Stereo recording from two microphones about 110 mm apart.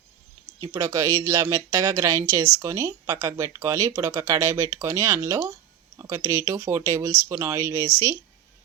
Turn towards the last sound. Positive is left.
turn(degrees=-25)  # may be behind; listen again after turning